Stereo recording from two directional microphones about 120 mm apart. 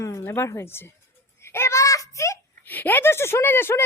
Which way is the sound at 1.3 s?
20° left (ahead or behind).